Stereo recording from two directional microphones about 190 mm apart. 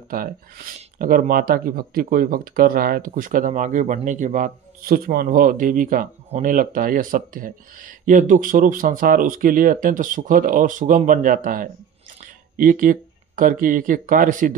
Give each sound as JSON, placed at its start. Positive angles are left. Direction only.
{"t": 0.1, "sound": "speech", "side_deg": -50}